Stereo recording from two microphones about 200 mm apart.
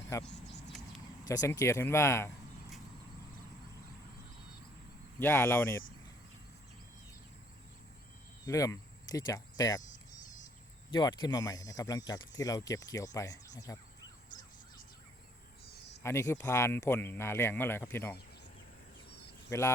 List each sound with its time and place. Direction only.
1.2 s speech: 15° left (ahead or behind)
5.2 s speech: 10° left (ahead or behind)
8.4 s speech: 15° left (ahead or behind)
10.9 s speech: 20° left (ahead or behind)
15.6 s a sound: 55° left (ahead or behind)
16.0 s speech: 15° left (ahead or behind)
19.5 s speech: 15° left (ahead or behind)